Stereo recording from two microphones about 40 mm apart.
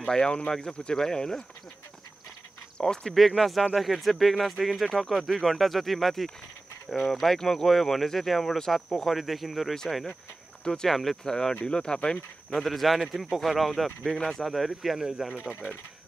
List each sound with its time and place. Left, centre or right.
0.1 s speech: left
2.8 s speech: centre
3.2 s speech: centre
10.6 s speech: centre
10.9 s speech: centre
11.2 s speech: centre
12.5 s speech: centre
15.0 s speech: centre